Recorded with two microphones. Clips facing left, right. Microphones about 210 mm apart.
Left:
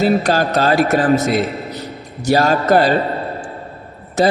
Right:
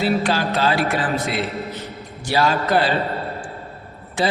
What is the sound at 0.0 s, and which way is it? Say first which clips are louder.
A man's voice: left 5 dB; 45° left (ahead or behind).